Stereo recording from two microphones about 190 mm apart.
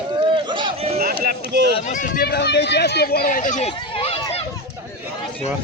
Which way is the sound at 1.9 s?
45° left (ahead or behind).